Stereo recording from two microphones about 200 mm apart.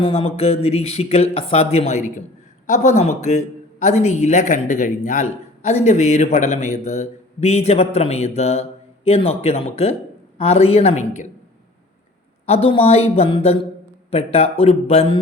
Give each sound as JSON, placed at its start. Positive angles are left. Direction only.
{"t": 0.0, "sound": "speech", "side_deg": 30}
{"t": 12.5, "sound": "speech", "side_deg": 30}